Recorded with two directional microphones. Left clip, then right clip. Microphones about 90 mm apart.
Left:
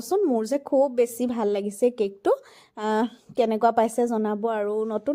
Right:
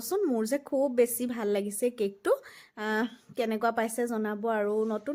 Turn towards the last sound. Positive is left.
turn(degrees=30)  # may be behind; listen again after turning